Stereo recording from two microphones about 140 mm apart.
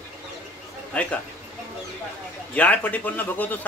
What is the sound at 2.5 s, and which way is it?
A man's voice, 10° left (ahead or behind).